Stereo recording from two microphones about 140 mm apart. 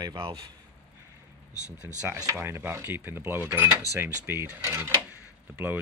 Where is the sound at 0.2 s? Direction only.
40° right (ahead or behind).